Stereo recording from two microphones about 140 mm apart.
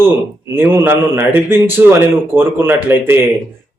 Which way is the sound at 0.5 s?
15° right (ahead or behind).